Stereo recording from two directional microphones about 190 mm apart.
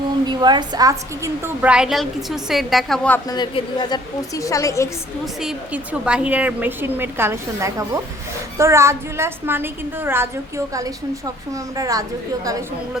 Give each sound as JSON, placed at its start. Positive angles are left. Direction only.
{"t": 0.3, "sound": "a woman's voice", "side_deg": -25}
{"t": 1.6, "sound": "a woman's voice", "side_deg": -5}
{"t": 3.2, "sound": "a woman's voice", "side_deg": 25}
{"t": 5.2, "sound": "a woman's voice", "side_deg": -5}
{"t": 11.8, "sound": "a woman's voice", "side_deg": -20}